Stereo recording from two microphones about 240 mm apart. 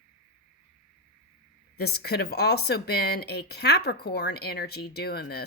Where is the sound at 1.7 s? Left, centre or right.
Left.